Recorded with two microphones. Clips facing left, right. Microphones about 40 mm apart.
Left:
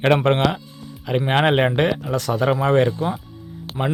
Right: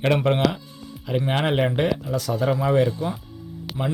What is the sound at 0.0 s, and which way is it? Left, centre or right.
Speech, left.